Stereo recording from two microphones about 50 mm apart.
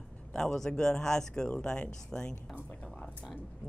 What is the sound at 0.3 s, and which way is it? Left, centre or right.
Speech, centre.